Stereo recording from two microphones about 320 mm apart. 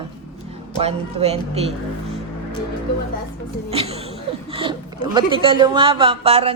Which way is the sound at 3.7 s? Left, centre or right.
Centre.